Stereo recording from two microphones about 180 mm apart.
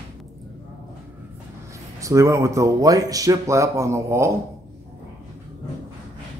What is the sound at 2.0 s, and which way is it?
Speech, 15° right (ahead or behind).